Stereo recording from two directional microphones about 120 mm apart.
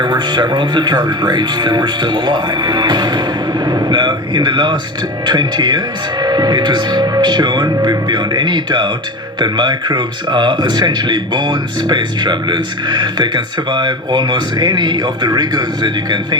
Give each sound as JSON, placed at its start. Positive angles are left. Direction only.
{"t": 0.0, "sound": "speech", "side_deg": -40}